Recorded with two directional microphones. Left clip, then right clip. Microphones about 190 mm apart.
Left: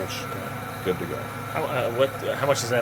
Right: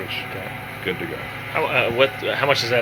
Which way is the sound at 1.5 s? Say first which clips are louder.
Right 6 dB; centre (ahead or behind).